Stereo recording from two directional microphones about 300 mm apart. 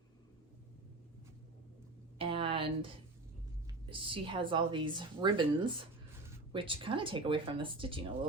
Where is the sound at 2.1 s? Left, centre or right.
Centre.